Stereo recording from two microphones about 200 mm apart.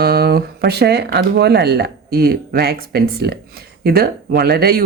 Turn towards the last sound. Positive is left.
turn(degrees=-50)  # may be behind; listen again after turning